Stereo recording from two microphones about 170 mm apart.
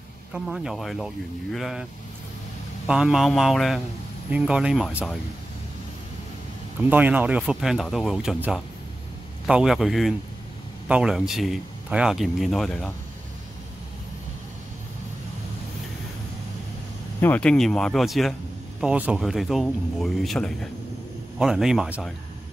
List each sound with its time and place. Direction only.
0.3 s speech: 5° right (ahead or behind)
2.9 s speech: centre (ahead or behind)
6.9 s speech: 10° right (ahead or behind)
9.5 s speech: 5° right (ahead or behind)
17.2 s speech: 10° left (ahead or behind)